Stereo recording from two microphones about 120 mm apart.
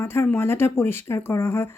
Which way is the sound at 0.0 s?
20° left (ahead or behind).